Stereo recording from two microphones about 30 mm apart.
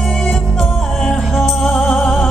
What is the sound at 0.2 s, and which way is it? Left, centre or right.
Music, left.